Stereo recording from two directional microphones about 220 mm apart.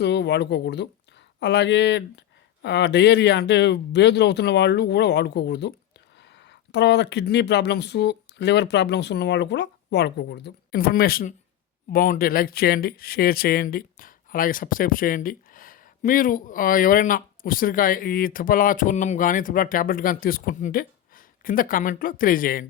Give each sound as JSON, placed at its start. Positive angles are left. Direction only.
{"t": 0.0, "sound": "speech", "side_deg": 50}